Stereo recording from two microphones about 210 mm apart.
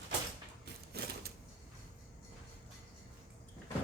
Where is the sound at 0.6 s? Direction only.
50° right (ahead or behind).